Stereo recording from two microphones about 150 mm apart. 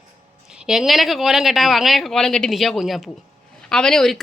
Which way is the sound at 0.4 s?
5° right (ahead or behind).